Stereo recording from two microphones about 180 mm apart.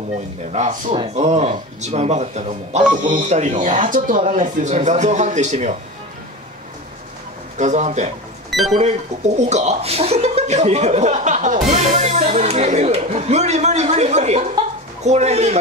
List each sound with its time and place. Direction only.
0.5 s speech: 40° right (ahead or behind)
7.5 s speech: 40° right (ahead or behind)
8.5 s a sound: centre (ahead or behind)
9.4 s speech: 40° right (ahead or behind)